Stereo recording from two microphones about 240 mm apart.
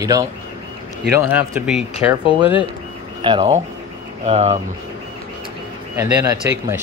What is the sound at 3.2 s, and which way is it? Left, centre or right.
Speech, right.